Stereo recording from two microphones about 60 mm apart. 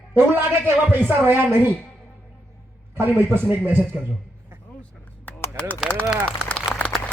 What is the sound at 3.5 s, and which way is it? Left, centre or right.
Speech, right.